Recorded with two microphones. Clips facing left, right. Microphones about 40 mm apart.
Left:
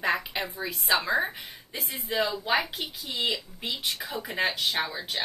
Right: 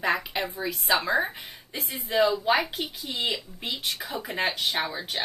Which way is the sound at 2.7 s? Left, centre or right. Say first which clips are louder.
Right 2 dB; centre.